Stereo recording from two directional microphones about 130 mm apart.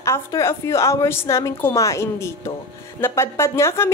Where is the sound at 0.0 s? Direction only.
20° left (ahead or behind).